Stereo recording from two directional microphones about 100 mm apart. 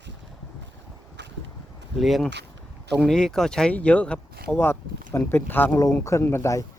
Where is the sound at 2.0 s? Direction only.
Centre (ahead or behind).